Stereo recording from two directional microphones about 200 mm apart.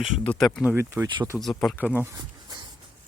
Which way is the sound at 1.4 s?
Centre (ahead or behind).